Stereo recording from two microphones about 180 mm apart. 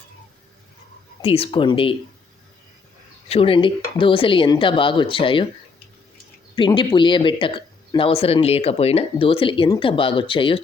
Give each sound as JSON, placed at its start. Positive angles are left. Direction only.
{"t": 1.2, "sound": "speech", "side_deg": 30}
{"t": 3.2, "sound": "speech", "side_deg": 30}
{"t": 6.6, "sound": "speech", "side_deg": 25}